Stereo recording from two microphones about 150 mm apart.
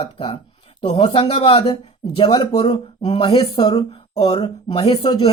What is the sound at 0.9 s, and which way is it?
Speech, 35° left (ahead or behind).